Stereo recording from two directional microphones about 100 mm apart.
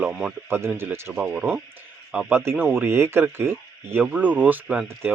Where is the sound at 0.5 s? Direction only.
25° right (ahead or behind).